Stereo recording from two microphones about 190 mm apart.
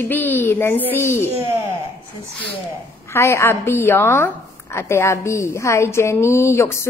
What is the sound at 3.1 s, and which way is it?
A woman's voice, 15° left (ahead or behind).